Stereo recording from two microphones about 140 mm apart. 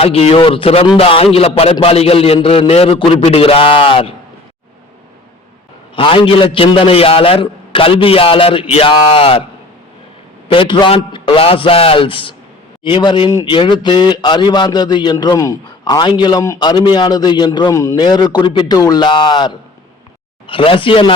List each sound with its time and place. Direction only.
0.0 s a man's voice: 45° left (ahead or behind)
6.0 s a man's voice: 40° left (ahead or behind)
10.5 s a man's voice: 35° left (ahead or behind)